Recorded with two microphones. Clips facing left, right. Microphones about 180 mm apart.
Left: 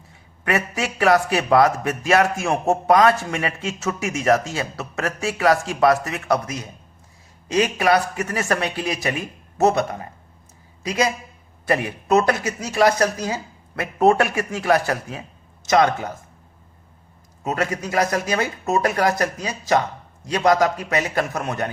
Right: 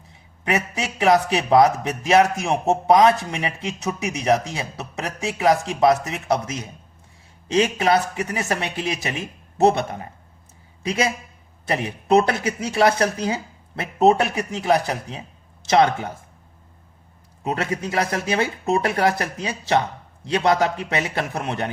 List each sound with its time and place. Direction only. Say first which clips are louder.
0.4 s a man's voice: left 1 dB; 20° right (ahead or behind)
12.0 s a man's voice: right 1 dB; 30° right (ahead or behind)
17.5 s a man's voice: left 1 dB; 30° right (ahead or behind)